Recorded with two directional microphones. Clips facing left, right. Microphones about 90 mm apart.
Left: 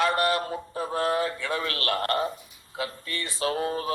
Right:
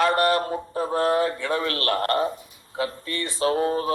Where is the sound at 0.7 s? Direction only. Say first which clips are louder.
Right 4 dB; 35° right (ahead or behind).